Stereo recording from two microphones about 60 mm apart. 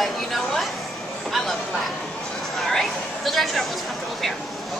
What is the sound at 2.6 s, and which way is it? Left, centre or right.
Speech, centre.